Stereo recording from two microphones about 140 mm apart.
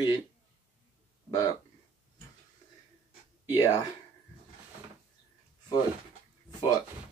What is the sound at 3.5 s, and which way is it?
Speech, 25° left (ahead or behind).